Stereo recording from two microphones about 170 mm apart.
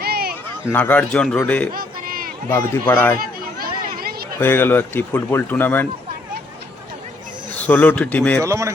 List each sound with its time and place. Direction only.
0.0 s a sound: 65° right (ahead or behind)
0.7 s a man's voice: 10° left (ahead or behind)
1.7 s a sound: 60° right (ahead or behind)
2.5 s a man's voice: 15° left (ahead or behind)
3.2 s chatter: 60° right (ahead or behind)
4.4 s a man's voice: 10° left (ahead or behind)
7.7 s a man's voice: 10° left (ahead or behind)
8.4 s speech: 15° right (ahead or behind)